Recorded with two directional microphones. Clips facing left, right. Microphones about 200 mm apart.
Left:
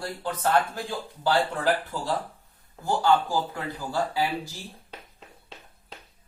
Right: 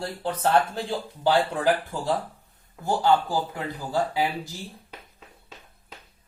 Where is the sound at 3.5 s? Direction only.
20° right (ahead or behind).